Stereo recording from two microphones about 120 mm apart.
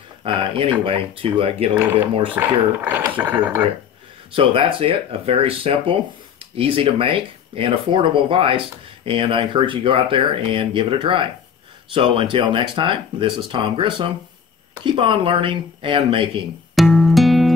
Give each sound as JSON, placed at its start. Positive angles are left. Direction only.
{"t": 0.2, "sound": "speech", "side_deg": -50}
{"t": 2.3, "sound": "speech", "side_deg": -15}
{"t": 4.4, "sound": "speech", "side_deg": -45}
{"t": 16.7, "sound": "music", "side_deg": 0}